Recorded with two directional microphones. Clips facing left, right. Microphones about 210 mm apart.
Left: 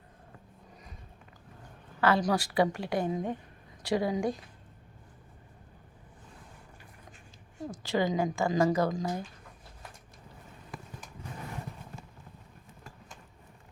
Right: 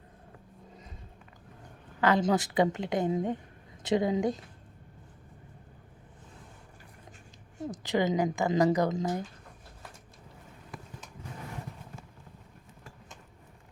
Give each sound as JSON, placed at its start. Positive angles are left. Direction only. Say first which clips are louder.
{"t": 2.0, "sound": "speech", "louder": "right 1 dB", "side_deg": -20}
{"t": 7.7, "sound": "speech", "louder": "right 1 dB", "side_deg": -20}